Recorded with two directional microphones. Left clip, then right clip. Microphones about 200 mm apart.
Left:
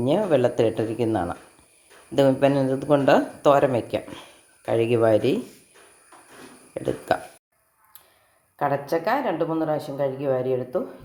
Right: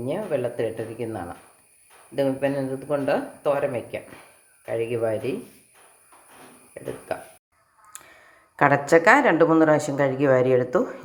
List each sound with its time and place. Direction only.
0.0 s speech: 40° left (ahead or behind)
8.5 s speech: 20° right (ahead or behind)